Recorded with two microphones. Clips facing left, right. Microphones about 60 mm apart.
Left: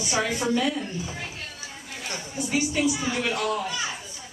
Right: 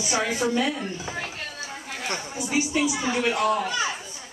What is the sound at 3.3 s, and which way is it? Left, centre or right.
Speech, right.